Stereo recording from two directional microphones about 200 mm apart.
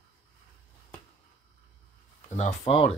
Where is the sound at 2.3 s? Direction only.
35° left (ahead or behind).